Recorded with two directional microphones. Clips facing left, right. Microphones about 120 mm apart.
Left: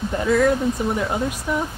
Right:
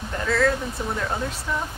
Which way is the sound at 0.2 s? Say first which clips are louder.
Left 4 dB; 15° left (ahead or behind).